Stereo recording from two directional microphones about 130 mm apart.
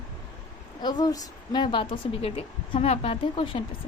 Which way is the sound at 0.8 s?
30° left (ahead or behind).